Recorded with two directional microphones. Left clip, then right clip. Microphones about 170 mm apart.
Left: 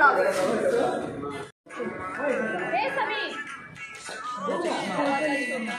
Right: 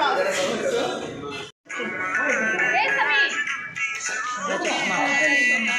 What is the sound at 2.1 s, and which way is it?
Music, 10° left (ahead or behind).